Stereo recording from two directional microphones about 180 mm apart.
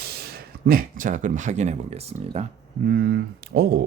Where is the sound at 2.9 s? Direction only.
65° right (ahead or behind).